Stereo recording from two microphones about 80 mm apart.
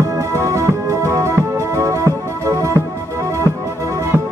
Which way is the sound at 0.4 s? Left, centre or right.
Right.